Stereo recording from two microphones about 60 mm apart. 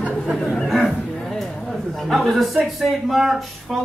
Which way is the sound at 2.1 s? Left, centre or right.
Centre.